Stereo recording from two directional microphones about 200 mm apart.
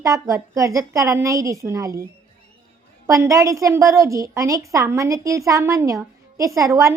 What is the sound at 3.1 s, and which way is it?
A woman's voice, 15° right (ahead or behind).